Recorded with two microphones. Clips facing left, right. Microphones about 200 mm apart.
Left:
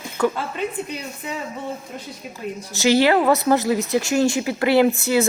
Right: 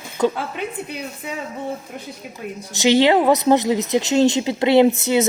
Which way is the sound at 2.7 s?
20° right (ahead or behind).